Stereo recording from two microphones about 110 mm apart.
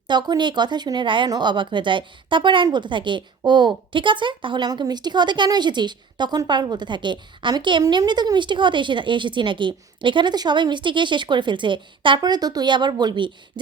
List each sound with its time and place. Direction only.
0.1 s speech: 40° right (ahead or behind)